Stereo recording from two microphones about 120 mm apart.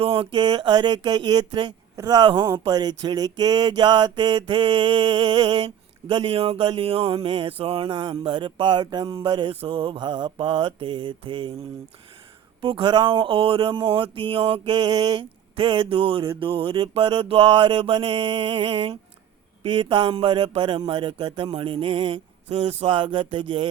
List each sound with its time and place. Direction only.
0.0 s speech: 50° right (ahead or behind)
0.3 s speech: 35° right (ahead or behind)
9.5 s speech: 55° right (ahead or behind)
12.6 s speech: 45° right (ahead or behind)
14.8 s speech: 35° right (ahead or behind)
22.4 s speech: 60° right (ahead or behind)
23.0 s speech: 45° right (ahead or behind)